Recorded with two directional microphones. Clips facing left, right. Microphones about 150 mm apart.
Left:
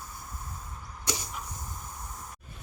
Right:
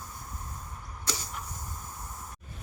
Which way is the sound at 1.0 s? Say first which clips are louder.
Left 2 dB; 15° left (ahead or behind).